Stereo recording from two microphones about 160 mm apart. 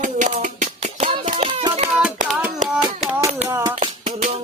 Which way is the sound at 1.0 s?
35° right (ahead or behind).